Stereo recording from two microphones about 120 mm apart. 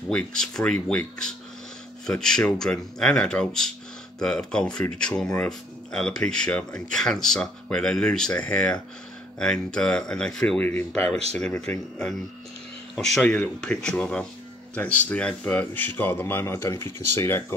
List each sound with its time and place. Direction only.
0.1 s speech: 5° left (ahead or behind)